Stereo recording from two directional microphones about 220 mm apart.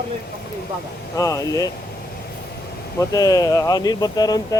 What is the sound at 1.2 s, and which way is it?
Speech, 15° left (ahead or behind).